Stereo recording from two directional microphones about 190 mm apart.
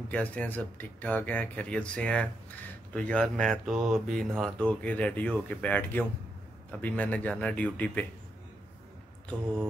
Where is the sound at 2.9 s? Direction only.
5° left (ahead or behind).